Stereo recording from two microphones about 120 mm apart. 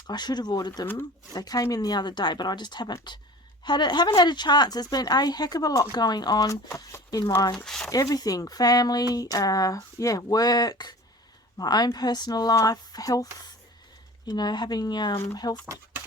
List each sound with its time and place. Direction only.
0.1 s a woman's voice: 35° left (ahead or behind)
7.5 s speech: 5° left (ahead or behind)
7.9 s a woman's voice: 30° left (ahead or behind)
14.3 s a woman's voice: 35° left (ahead or behind)
15.6 s a sound: 20° right (ahead or behind)